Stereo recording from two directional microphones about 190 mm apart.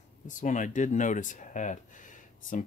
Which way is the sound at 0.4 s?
40° left (ahead or behind).